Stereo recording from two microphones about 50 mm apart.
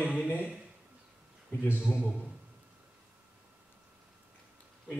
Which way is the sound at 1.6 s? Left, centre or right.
Left.